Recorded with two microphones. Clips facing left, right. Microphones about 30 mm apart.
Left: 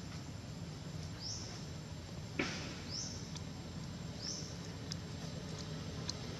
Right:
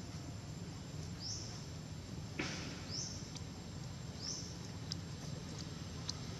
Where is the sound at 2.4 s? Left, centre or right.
Centre.